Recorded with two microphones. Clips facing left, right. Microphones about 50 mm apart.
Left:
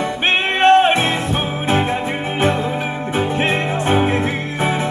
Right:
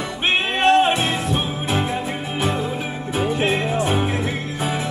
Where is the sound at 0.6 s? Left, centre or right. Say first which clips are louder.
Left 4 dB; left.